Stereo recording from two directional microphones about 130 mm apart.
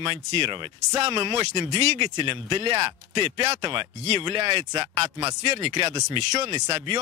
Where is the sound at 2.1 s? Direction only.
40° right (ahead or behind).